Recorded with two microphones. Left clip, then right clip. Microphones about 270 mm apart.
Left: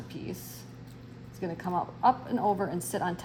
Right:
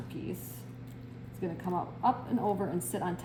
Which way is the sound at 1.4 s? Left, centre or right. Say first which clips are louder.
Left 3 dB; left.